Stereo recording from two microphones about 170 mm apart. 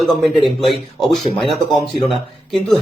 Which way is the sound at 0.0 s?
Centre (ahead or behind).